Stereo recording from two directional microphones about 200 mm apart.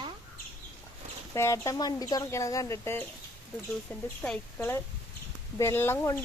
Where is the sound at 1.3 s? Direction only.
15° left (ahead or behind).